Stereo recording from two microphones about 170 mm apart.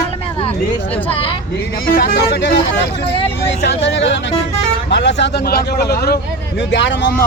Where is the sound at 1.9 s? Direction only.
65° left (ahead or behind); by 2.8 s 90° left.